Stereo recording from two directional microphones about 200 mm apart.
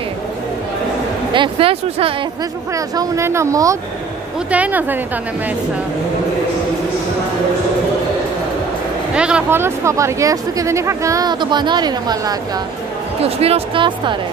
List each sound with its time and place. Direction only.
1.3 s speech: 25° right (ahead or behind)
2.7 s speech: 15° right (ahead or behind)
9.1 s speech: 5° right (ahead or behind); by 14.1 s 25° right (ahead or behind)